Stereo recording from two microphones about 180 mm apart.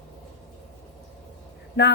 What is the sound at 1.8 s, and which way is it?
Speech, 70° left (ahead or behind).